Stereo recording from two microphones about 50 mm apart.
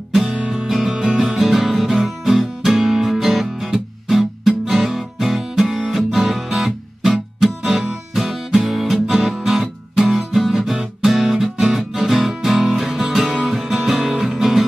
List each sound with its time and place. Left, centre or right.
0.1 s music: centre
0.4 s music: centre
0.7 s music: centre